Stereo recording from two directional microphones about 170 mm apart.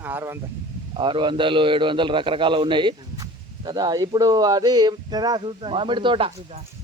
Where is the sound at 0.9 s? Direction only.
25° right (ahead or behind).